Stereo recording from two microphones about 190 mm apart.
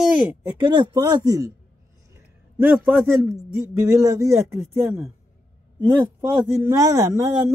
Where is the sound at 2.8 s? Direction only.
10° right (ahead or behind).